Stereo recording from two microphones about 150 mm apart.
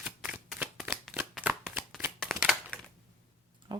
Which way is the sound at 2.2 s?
5° right (ahead or behind).